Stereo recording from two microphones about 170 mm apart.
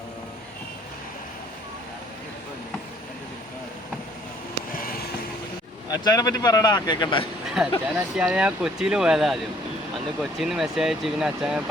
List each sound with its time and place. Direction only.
4.7 s fireworks: 60° left (ahead or behind)
5.9 s speech: 20° left (ahead or behind)
7.4 s a sound: 5° right (ahead or behind)
7.9 s speech: 5° right (ahead or behind)